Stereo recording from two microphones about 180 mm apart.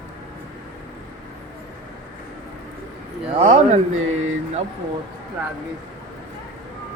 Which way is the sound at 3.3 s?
30° right (ahead or behind).